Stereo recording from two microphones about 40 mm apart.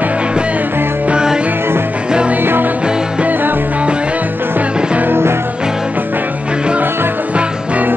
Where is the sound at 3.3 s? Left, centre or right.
Right.